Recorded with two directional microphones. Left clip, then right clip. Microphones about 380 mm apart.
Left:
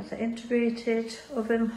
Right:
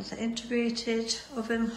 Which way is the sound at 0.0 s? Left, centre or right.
Centre.